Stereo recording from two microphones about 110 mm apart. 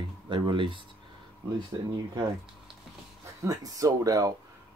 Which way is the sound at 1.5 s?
35° right (ahead or behind).